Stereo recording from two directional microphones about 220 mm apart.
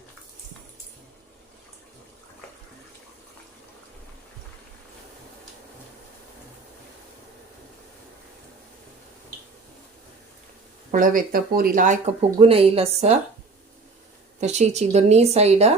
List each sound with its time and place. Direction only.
10.9 s speech: 40° right (ahead or behind)
14.4 s speech: 30° right (ahead or behind)